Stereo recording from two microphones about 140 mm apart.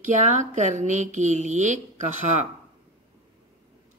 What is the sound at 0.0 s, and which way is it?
Speech, 60° right (ahead or behind).